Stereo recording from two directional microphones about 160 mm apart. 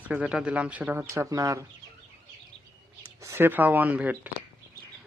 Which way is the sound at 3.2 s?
15° right (ahead or behind).